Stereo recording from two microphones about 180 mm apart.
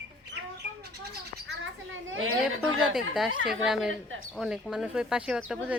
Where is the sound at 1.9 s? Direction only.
90° right.